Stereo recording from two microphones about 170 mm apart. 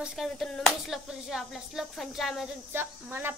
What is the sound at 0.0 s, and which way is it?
Speech, centre (ahead or behind).